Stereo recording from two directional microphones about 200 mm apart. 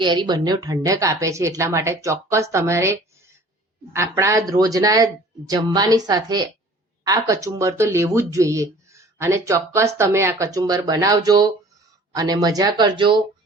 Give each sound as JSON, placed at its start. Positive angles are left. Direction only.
{"t": 0.0, "sound": "speech", "side_deg": -20}